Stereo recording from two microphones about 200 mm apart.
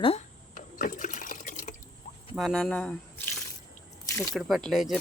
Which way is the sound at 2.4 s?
Centre (ahead or behind).